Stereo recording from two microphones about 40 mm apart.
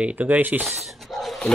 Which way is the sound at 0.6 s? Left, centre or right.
Centre.